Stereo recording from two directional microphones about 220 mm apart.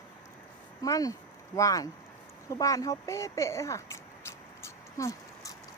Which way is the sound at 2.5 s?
15° left (ahead or behind).